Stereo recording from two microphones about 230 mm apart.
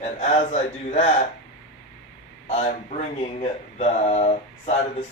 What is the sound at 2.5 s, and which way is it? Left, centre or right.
Speech, left.